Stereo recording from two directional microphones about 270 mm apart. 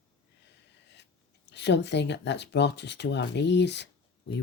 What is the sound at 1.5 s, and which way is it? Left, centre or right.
Speech, left.